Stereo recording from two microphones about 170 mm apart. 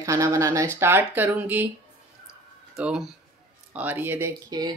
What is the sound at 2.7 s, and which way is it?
Speech, 5° right (ahead or behind).